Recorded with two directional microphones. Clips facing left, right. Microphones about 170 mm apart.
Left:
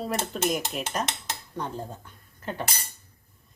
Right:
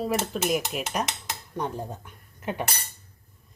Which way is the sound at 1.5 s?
15° right (ahead or behind).